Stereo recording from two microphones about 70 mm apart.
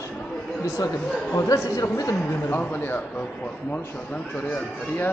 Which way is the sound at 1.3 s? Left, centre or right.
Left.